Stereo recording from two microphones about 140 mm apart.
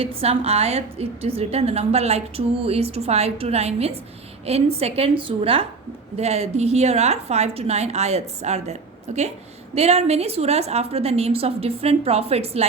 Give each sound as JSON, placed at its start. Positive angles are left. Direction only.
{"t": 0.0, "sound": "a woman's voice", "side_deg": -45}